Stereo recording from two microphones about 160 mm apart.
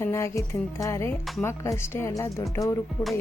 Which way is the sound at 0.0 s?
15° left (ahead or behind).